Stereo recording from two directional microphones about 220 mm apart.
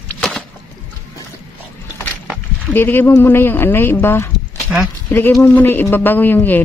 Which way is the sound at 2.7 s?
10° left (ahead or behind).